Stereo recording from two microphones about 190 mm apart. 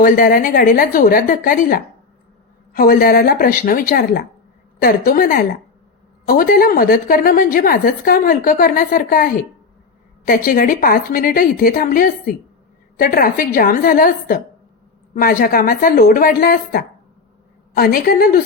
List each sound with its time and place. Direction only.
0.0 s a woman's voice: 45° left (ahead or behind)